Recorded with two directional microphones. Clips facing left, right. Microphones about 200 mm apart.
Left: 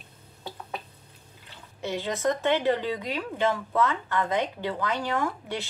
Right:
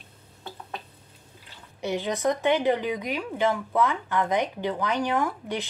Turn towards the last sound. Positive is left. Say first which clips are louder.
# right 2 dB
turn(degrees=-15)  # may be behind; listen again after turning